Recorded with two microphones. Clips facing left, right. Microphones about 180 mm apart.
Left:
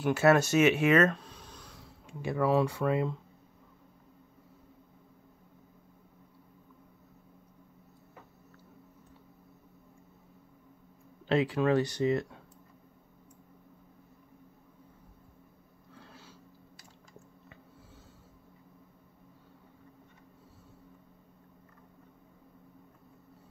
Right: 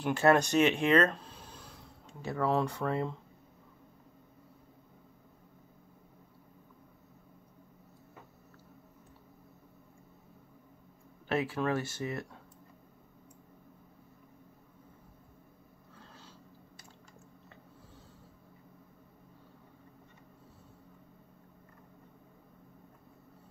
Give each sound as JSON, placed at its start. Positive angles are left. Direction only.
{"t": 0.0, "sound": "speech", "side_deg": 5}
{"t": 11.2, "sound": "speech", "side_deg": 20}